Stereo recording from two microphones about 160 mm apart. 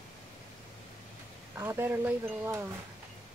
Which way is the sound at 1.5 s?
15° right (ahead or behind).